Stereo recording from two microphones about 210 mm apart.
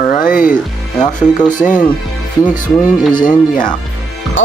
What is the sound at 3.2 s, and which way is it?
Speech, 40° left (ahead or behind).